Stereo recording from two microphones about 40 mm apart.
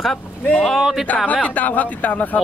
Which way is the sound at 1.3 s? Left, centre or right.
Left.